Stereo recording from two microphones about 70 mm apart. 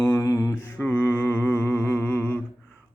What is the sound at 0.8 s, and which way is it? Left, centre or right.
Humming, left.